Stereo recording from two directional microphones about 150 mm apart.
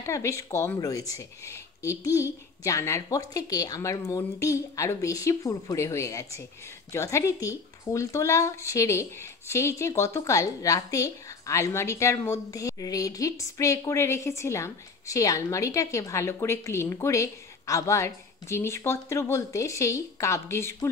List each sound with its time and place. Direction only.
0.0 s speech: 20° left (ahead or behind)